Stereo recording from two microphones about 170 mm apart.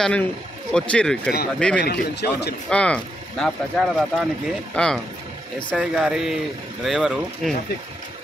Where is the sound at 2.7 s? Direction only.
5° left (ahead or behind).